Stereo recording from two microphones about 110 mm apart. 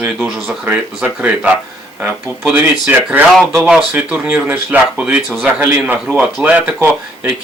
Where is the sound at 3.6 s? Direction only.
10° right (ahead or behind).